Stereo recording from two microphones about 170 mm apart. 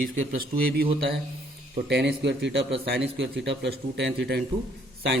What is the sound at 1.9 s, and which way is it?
A man's voice, 80° right.